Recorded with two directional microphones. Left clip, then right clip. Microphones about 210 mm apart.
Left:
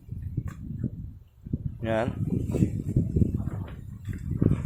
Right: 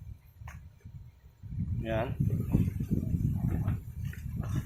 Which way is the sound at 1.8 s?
45° left (ahead or behind).